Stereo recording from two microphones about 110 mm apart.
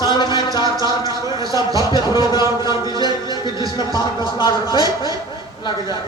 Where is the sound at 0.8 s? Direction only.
35° right (ahead or behind).